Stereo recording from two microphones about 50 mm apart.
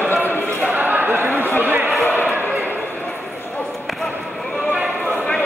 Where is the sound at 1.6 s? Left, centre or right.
Right.